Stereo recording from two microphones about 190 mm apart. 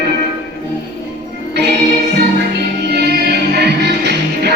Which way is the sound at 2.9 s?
60° right (ahead or behind).